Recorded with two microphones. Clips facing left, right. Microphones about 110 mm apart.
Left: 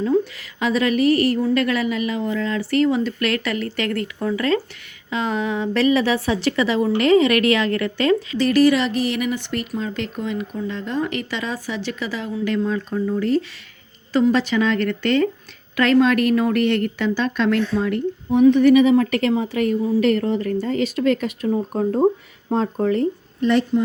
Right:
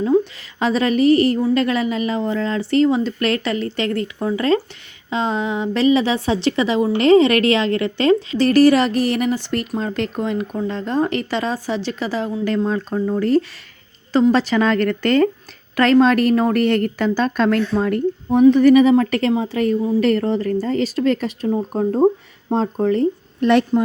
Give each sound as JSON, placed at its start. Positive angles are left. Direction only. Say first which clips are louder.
{"t": 0.6, "sound": "a woman's voice", "louder": "right 2 dB", "side_deg": -30}
{"t": 14.1, "sound": "a woman's voice", "louder": "right 2 dB", "side_deg": -30}
{"t": 23.4, "sound": "a woman's voice", "louder": "right 3 dB", "side_deg": -65}